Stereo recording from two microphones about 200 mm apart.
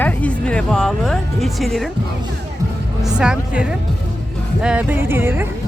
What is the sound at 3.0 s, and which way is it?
Speech, 5° right (ahead or behind).